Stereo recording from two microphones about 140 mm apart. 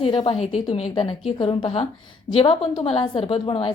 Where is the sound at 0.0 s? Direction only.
40° left (ahead or behind).